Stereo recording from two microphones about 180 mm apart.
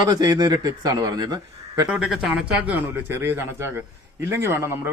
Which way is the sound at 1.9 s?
5° right (ahead or behind).